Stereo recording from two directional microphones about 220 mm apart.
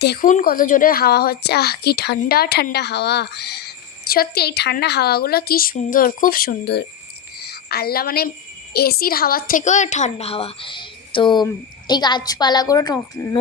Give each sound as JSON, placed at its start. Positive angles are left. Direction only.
{"t": 0.0, "sound": "a woman's voice", "side_deg": 45}
{"t": 7.3, "sound": "a sound", "side_deg": 45}
{"t": 8.7, "sound": "a woman's voice", "side_deg": 45}